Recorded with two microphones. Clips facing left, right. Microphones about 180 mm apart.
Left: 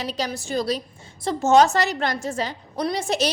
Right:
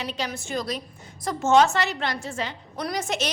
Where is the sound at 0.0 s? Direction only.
40° left (ahead or behind).